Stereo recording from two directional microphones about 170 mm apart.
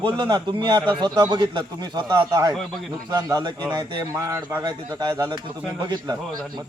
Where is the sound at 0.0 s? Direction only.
30° right (ahead or behind).